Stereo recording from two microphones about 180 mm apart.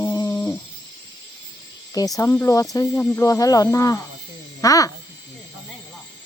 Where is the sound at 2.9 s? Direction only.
5° left (ahead or behind).